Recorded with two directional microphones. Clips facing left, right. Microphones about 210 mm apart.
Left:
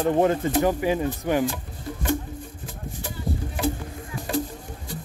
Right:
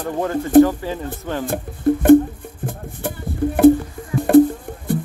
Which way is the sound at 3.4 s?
60° right (ahead or behind).